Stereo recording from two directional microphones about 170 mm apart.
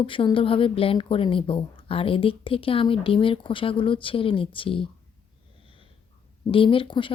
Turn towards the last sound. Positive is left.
turn(degrees=30)  # may be behind; listen again after turning